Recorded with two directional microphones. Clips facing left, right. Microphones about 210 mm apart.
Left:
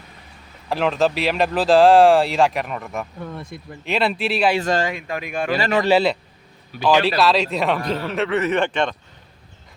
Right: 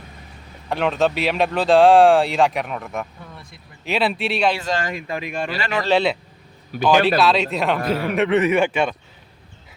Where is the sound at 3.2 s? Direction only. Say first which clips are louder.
Left 9 dB; 55° left (ahead or behind).